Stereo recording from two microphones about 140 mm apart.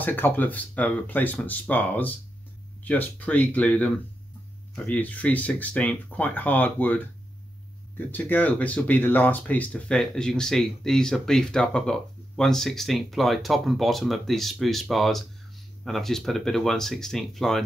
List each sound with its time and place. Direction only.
0.0 s speech: 15° left (ahead or behind)
8.1 s speech: 10° left (ahead or behind)